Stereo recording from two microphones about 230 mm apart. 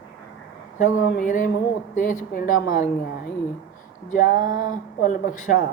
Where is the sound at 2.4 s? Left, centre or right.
Left.